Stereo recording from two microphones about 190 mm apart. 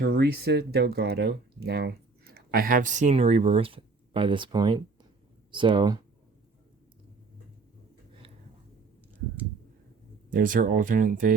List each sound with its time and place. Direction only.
0.0 s speech: 55° right (ahead or behind); by 6.0 s 25° right (ahead or behind)
10.2 s speech: 45° right (ahead or behind)